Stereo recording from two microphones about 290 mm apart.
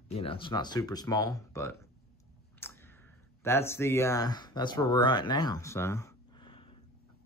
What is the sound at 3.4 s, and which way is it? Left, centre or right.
Speech, centre.